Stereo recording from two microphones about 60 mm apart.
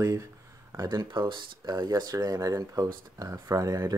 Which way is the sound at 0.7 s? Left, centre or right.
Right.